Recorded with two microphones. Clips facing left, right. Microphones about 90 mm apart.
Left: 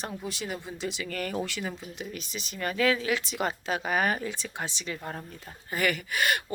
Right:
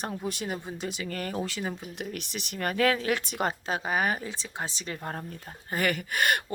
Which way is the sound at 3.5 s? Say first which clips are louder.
Even; 30° right (ahead or behind).